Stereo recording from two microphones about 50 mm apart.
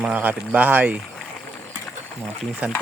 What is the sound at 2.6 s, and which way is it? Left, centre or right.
Speech, right.